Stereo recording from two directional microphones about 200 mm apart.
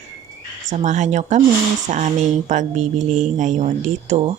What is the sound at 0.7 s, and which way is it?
Speech, 40° right (ahead or behind).